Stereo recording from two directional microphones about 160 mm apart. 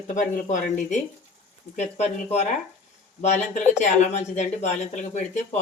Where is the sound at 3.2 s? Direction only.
45° left (ahead or behind).